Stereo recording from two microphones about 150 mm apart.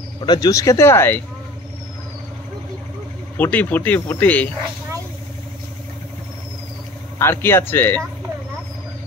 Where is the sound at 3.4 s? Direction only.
10° left (ahead or behind).